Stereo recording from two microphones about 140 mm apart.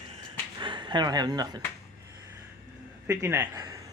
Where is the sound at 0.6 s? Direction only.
35° right (ahead or behind).